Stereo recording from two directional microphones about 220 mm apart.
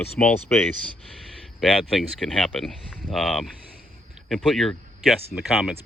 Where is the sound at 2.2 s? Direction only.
Centre (ahead or behind).